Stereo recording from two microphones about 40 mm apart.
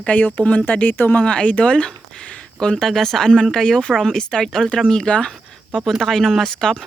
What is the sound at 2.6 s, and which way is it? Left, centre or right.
Speech, centre.